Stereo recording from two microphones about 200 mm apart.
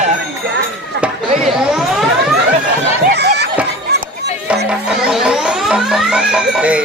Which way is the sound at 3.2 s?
55° right (ahead or behind).